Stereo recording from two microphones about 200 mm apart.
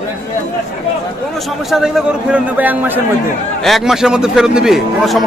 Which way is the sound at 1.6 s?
Centre (ahead or behind).